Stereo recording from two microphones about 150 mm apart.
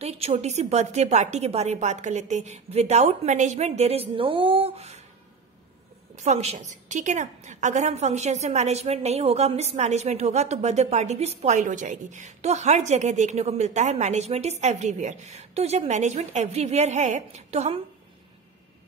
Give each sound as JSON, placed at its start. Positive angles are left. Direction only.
{"t": 0.0, "sound": "a woman's voice", "side_deg": -45}
{"t": 6.1, "sound": "a woman's voice", "side_deg": -50}